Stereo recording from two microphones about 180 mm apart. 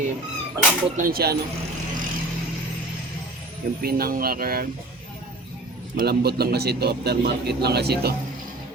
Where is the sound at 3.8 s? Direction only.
55° right (ahead or behind).